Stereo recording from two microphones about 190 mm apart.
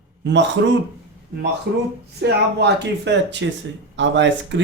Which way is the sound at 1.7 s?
65° right (ahead or behind).